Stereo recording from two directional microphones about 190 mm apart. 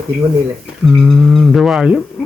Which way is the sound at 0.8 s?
Centre (ahead or behind).